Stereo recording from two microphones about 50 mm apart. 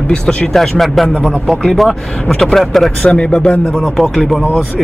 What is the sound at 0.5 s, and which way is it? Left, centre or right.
Speech, centre.